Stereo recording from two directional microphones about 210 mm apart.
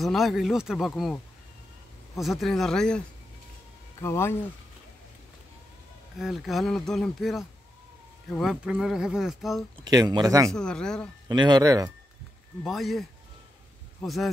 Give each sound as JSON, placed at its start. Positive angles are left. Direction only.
{"t": 0.0, "sound": "speech", "side_deg": 0}
{"t": 4.0, "sound": "speech", "side_deg": 10}
{"t": 6.1, "sound": "speech", "side_deg": 0}
{"t": 9.8, "sound": "speech", "side_deg": -20}
{"t": 10.5, "sound": "speech", "side_deg": 5}
{"t": 11.2, "sound": "speech", "side_deg": -20}
{"t": 12.6, "sound": "speech", "side_deg": 0}
{"t": 14.0, "sound": "speech", "side_deg": 0}